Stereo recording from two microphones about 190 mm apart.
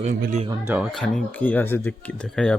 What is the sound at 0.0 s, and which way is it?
Speech, 45° right (ahead or behind).